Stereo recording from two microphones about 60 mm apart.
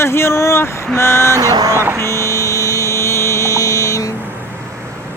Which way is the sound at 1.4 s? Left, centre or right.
Right.